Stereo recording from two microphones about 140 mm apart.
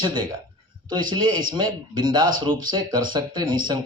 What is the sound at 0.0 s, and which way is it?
Speech, 35° right (ahead or behind).